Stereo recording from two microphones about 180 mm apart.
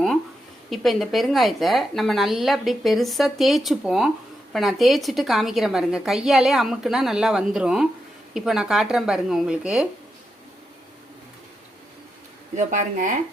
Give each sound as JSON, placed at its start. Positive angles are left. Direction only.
{"t": 0.7, "sound": "a woman's voice", "side_deg": 0}
{"t": 12.5, "sound": "speech", "side_deg": -45}